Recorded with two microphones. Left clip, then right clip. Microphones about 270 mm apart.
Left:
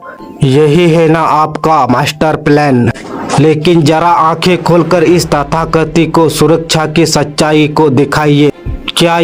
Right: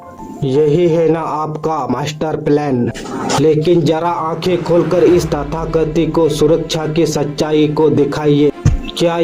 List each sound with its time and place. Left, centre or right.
0.4 s a man's voice: left